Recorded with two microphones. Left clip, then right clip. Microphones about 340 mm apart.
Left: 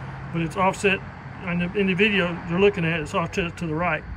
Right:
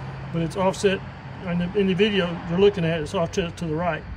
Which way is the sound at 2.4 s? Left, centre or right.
Centre.